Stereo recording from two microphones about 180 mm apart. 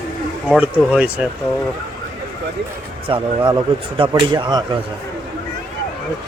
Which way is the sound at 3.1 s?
30° right (ahead or behind).